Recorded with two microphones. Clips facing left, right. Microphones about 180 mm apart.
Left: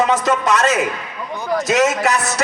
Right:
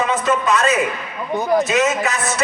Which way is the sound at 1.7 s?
75° left (ahead or behind).